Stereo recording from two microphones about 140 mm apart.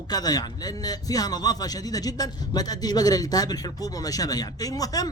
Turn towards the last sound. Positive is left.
turn(degrees=25)  # may be behind; listen again after turning